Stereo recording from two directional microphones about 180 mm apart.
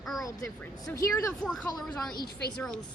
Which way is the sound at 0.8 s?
20° left (ahead or behind).